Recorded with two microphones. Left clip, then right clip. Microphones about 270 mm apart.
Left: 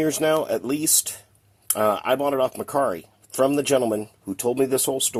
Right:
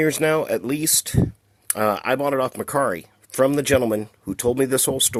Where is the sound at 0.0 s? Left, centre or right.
Right.